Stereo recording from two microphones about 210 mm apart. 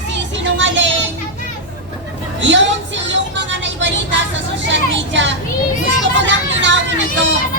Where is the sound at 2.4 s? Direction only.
60° right (ahead or behind).